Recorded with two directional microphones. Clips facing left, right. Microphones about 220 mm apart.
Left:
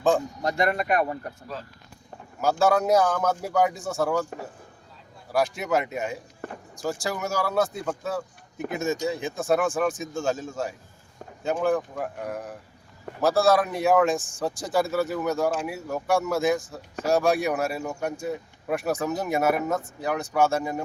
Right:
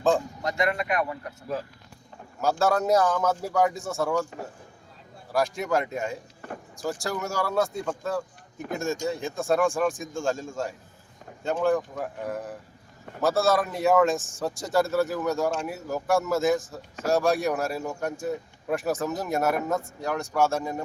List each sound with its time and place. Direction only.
0.4 s speech: 35° left (ahead or behind)
2.4 s speech: centre (ahead or behind)
5.3 s speech: centre (ahead or behind)